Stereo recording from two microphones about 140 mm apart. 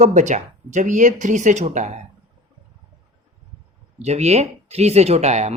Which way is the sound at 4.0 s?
50° right (ahead or behind).